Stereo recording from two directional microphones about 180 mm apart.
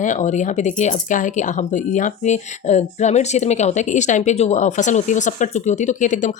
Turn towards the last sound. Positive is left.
turn(degrees=45)  # may be behind; listen again after turning